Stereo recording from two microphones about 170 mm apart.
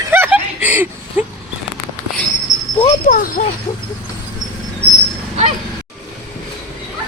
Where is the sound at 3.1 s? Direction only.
55° left (ahead or behind).